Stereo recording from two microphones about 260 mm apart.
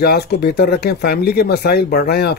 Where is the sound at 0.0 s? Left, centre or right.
Left.